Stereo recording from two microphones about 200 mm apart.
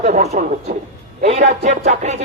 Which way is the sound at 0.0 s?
35° right (ahead or behind).